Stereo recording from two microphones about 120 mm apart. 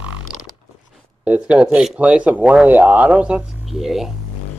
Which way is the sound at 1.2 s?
10° right (ahead or behind).